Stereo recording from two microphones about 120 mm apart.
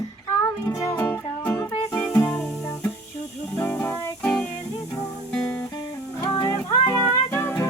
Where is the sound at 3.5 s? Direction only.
20° left (ahead or behind).